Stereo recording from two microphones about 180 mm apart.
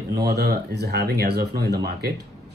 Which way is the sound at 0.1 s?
65° right (ahead or behind).